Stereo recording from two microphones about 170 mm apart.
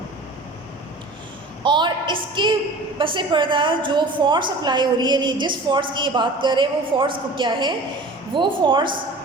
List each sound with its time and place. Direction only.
1.6 s a woman's voice: 25° right (ahead or behind)